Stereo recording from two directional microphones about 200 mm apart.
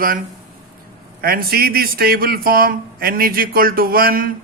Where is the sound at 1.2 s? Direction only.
50° right (ahead or behind).